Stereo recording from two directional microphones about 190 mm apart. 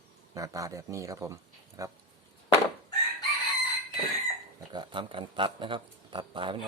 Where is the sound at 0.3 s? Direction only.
15° right (ahead or behind).